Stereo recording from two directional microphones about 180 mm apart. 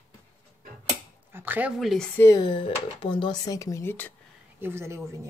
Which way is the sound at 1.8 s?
Centre (ahead or behind).